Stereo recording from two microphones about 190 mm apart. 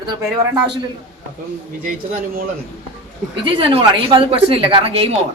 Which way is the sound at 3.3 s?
25° right (ahead or behind).